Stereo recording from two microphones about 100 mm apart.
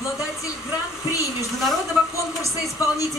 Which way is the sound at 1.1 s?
35° left (ahead or behind).